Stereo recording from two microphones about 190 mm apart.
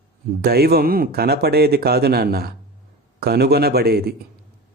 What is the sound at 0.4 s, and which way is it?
A man's voice, 55° right (ahead or behind).